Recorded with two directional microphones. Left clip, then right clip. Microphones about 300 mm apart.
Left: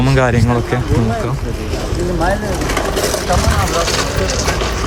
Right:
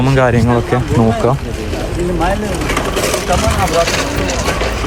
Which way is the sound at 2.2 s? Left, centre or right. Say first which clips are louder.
Even; right.